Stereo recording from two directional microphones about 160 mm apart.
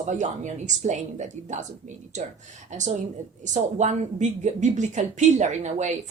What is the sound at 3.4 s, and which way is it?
Speech, 50° right (ahead or behind).